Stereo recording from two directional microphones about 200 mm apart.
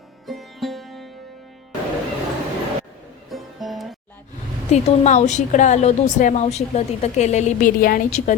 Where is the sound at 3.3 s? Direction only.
Centre (ahead or behind).